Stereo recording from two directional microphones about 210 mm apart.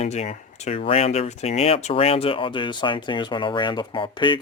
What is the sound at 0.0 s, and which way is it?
Speech, 30° left (ahead or behind).